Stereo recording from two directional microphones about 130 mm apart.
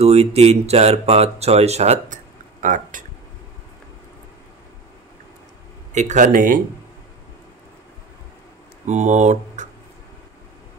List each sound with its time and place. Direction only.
0.0 s speech: 55° right (ahead or behind)
2.6 s speech: 85° right
5.9 s speech: 70° right (ahead or behind); by 6.6 s 90° right
8.8 s speech: 65° right (ahead or behind)